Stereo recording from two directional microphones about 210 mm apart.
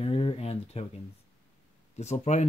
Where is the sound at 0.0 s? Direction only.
25° left (ahead or behind).